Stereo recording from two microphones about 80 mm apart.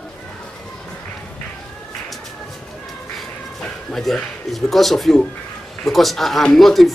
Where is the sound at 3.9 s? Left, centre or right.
Centre.